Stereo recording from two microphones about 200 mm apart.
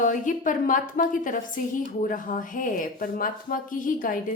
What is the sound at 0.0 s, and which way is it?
A woman's voice, 40° left (ahead or behind).